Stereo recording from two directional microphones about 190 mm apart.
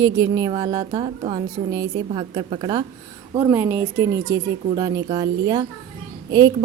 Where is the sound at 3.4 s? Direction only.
10° right (ahead or behind).